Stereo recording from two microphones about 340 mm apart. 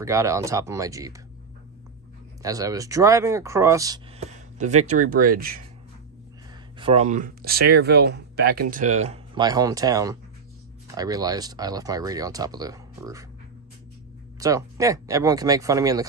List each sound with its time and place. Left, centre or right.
0.0 s speech: centre
2.4 s speech: centre; by 5.6 s right
6.8 s speech: centre
14.4 s speech: centre